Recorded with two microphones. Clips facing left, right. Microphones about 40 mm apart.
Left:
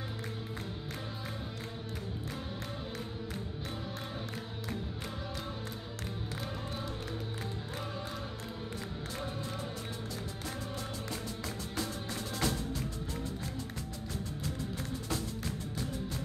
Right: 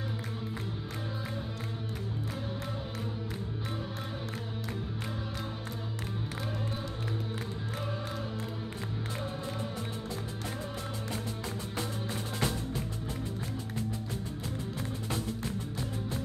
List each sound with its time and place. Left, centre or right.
11.7 s music: centre